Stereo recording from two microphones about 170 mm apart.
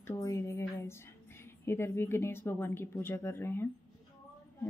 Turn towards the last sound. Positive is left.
turn(degrees=15)  # may be behind; listen again after turning